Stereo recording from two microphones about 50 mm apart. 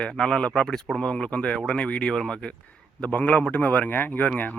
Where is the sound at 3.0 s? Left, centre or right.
Left.